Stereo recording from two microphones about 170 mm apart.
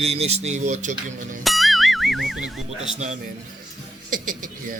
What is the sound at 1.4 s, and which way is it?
Music, centre (ahead or behind).